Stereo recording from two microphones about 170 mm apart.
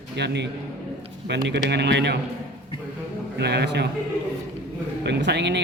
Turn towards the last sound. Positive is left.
turn(degrees=-90)